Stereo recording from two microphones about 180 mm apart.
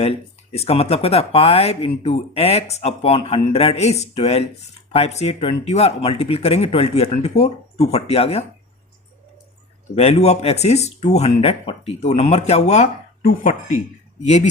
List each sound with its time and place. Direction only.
0.5 s speech: 35° left (ahead or behind)
9.9 s speech: 35° left (ahead or behind)